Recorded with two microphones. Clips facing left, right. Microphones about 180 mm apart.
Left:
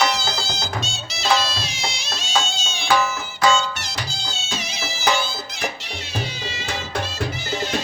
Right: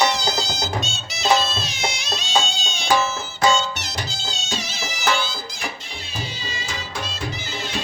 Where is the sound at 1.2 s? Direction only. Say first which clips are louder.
Right 2 dB; 20° right (ahead or behind).